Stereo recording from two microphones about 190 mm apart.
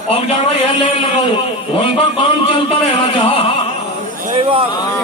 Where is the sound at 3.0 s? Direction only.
25° left (ahead or behind).